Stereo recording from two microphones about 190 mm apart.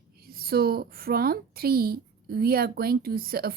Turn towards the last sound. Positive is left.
turn(degrees=-50)  # may be behind; listen again after turning